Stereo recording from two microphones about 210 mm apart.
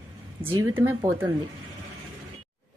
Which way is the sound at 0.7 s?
10° right (ahead or behind).